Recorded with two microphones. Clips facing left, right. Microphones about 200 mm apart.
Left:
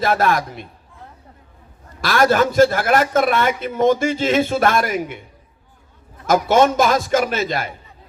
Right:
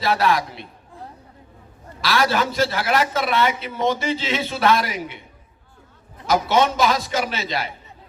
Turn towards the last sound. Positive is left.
turn(degrees=50)  # may be behind; listen again after turning